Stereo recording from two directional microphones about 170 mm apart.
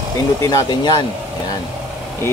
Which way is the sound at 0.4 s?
20° left (ahead or behind).